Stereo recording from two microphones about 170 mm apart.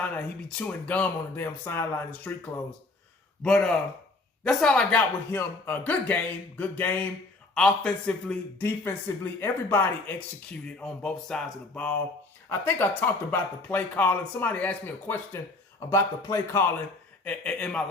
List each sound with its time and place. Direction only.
0.0 s speech: 10° left (ahead or behind)
3.4 s speech: 5° left (ahead or behind)